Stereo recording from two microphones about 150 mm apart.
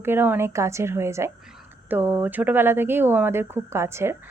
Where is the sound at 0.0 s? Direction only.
15° right (ahead or behind).